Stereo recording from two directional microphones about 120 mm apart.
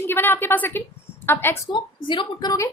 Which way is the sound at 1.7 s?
40° left (ahead or behind).